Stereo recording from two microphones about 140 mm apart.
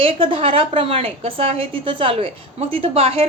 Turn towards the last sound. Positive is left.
turn(degrees=-45)  # may be behind; listen again after turning